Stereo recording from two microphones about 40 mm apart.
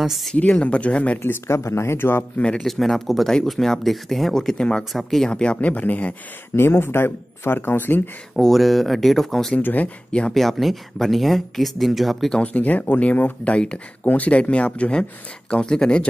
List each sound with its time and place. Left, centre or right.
0.0 s speech: centre
0.4 s speech: left
1.2 s speech: left
2.6 s speech: centre
4.3 s speech: centre
4.9 s speech: centre
5.3 s speech: left
6.5 s speech: left
7.5 s speech: left
8.4 s speech: centre
9.6 s speech: left
10.3 s speech: centre
12.5 s speech: left